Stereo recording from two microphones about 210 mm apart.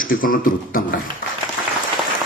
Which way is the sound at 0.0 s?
40° left (ahead or behind).